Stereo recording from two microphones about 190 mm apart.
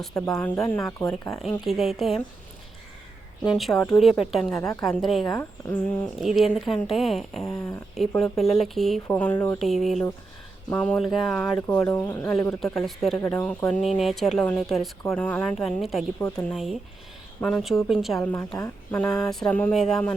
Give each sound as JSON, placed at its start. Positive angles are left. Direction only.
{"t": 0.1, "sound": "speech", "side_deg": 15}
{"t": 1.3, "sound": "speech", "side_deg": 0}
{"t": 3.5, "sound": "speech", "side_deg": 0}
{"t": 4.5, "sound": "speech", "side_deg": 15}
{"t": 4.8, "sound": "speech", "side_deg": 0}
{"t": 5.3, "sound": "speech", "side_deg": 10}
{"t": 6.1, "sound": "speech", "side_deg": 0}
{"t": 7.4, "sound": "speech", "side_deg": 15}
{"t": 7.9, "sound": "speech", "side_deg": 0}
{"t": 9.6, "sound": "speech", "side_deg": 0}
{"t": 12.7, "sound": "speech", "side_deg": 0}
{"t": 17.4, "sound": "speech", "side_deg": 0}
{"t": 18.3, "sound": "speech", "side_deg": 15}